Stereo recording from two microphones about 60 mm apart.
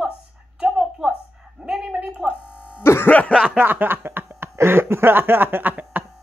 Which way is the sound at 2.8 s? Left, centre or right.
Left.